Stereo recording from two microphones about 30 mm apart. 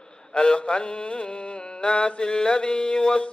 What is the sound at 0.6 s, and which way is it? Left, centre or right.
Mantra, left.